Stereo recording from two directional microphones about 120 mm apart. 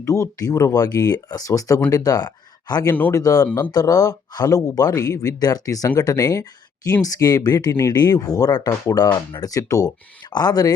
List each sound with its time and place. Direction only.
0.0 s speech: 25° left (ahead or behind)
2.9 s speech: 15° left (ahead or behind)
3.2 s speech: 30° left (ahead or behind)
3.4 s speech: 20° left (ahead or behind)
3.7 s speech: 30° left (ahead or behind)